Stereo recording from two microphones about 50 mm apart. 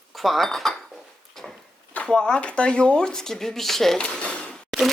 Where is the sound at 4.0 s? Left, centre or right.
Centre.